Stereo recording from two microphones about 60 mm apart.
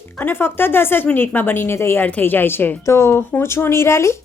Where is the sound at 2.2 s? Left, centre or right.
Left.